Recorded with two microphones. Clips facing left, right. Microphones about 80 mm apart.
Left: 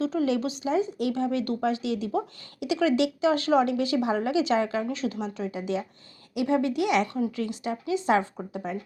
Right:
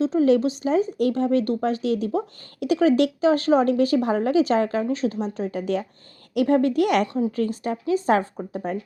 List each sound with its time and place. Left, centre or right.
0.0 s speech: right